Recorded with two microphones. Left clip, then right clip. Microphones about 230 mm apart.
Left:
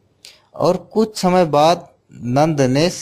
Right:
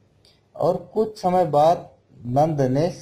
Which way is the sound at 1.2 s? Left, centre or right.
Left.